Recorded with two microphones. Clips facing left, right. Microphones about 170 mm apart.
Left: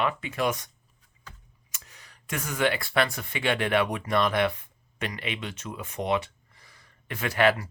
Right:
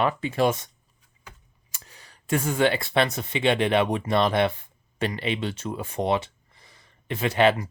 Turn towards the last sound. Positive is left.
turn(degrees=-20)  # may be behind; listen again after turning